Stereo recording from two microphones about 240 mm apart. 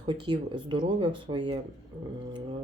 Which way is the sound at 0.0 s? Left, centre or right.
Centre.